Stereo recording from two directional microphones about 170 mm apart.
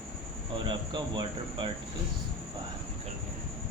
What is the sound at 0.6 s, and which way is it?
Speech, 25° right (ahead or behind).